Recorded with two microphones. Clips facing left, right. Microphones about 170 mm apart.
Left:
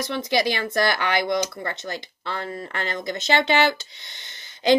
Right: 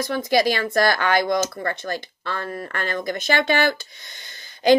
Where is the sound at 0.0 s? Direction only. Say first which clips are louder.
Right 3 dB; 20° left (ahead or behind).